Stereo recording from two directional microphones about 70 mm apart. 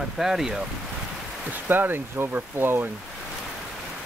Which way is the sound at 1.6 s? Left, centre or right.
Right.